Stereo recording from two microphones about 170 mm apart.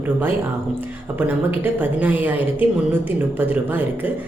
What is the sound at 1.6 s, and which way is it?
A woman's voice, 10° right (ahead or behind).